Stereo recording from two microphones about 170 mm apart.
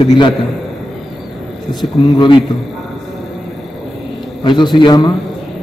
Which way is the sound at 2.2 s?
30° left (ahead or behind).